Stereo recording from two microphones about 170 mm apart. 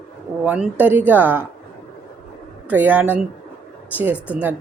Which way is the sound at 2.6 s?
10° right (ahead or behind).